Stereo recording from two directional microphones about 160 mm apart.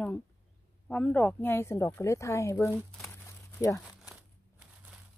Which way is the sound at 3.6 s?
20° left (ahead or behind).